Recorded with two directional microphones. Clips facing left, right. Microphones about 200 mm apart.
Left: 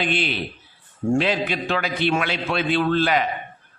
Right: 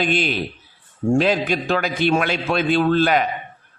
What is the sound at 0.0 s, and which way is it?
A man's voice, 45° right (ahead or behind).